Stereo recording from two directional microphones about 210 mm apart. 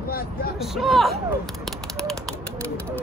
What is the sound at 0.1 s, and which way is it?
Speech, 45° left (ahead or behind).